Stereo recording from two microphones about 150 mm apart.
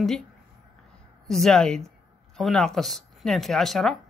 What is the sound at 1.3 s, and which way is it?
A woman's voice, 5° left (ahead or behind).